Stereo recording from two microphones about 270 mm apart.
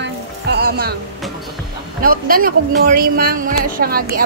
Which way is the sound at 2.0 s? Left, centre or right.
Right.